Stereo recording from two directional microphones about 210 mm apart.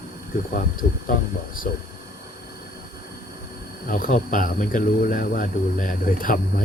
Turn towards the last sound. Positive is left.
turn(degrees=40)  # may be behind; listen again after turning